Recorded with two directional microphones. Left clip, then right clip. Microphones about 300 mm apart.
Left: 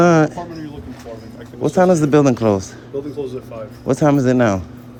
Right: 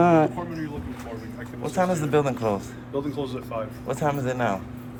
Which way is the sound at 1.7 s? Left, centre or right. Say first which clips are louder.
Left 9 dB; left.